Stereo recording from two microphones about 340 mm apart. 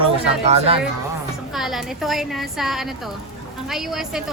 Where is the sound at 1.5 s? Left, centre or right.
Centre.